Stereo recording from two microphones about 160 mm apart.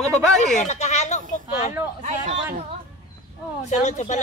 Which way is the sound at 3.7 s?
45° left (ahead or behind).